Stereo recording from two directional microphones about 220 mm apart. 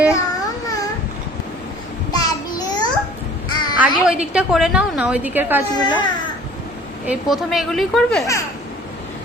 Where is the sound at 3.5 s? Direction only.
20° left (ahead or behind).